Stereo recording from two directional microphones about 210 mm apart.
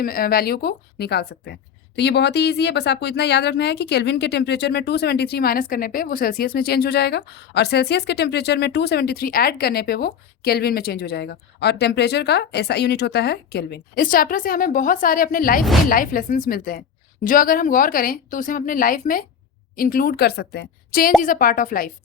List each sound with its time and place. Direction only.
0.0 s speech: 45° left (ahead or behind)